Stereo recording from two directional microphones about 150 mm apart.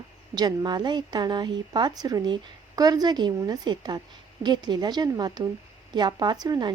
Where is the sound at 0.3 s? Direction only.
30° right (ahead or behind).